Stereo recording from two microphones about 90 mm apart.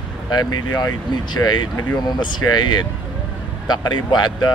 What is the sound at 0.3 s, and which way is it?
Speech, 50° left (ahead or behind).